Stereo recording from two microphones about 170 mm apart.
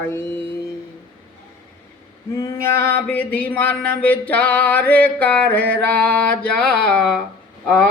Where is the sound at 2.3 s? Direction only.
15° left (ahead or behind).